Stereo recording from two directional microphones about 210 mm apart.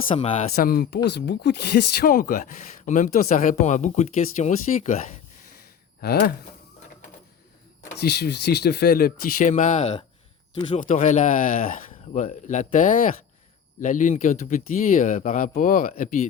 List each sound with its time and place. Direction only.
0.1 s speech: 30° left (ahead or behind)
0.5 s speech: 45° left (ahead or behind)
6.0 s speech: 45° left (ahead or behind)
7.9 s speech: 50° left (ahead or behind); by 9.9 s 35° left (ahead or behind)
10.5 s speech: 25° left (ahead or behind)
10.8 s speech: 35° left (ahead or behind)